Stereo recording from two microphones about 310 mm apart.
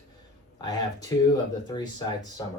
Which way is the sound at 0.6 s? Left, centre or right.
Centre.